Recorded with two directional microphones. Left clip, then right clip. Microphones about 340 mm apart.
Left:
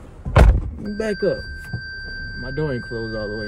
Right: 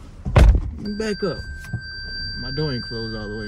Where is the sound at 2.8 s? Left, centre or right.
Centre.